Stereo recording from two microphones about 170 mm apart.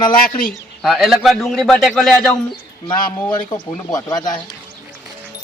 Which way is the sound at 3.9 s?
20° left (ahead or behind).